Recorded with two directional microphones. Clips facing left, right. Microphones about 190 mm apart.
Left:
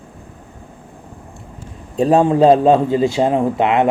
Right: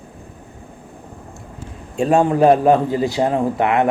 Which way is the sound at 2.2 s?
25° left (ahead or behind).